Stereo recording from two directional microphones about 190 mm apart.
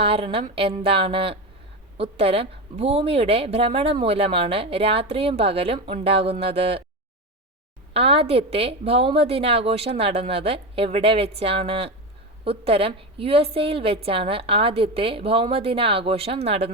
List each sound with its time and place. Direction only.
0.0 s a woman's voice: 30° right (ahead or behind)
7.9 s a woman's voice: 30° right (ahead or behind)